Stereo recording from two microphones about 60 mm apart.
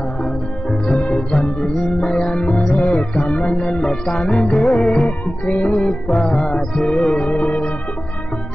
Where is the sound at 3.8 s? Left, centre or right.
Centre.